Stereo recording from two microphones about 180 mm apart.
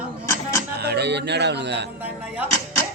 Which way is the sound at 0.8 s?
65° right (ahead or behind).